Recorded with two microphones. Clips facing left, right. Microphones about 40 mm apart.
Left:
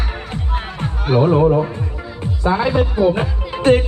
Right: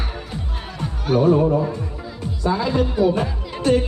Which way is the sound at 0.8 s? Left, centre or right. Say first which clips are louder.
Left 2 dB; left.